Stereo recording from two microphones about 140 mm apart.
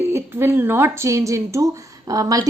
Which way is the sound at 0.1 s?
20° right (ahead or behind).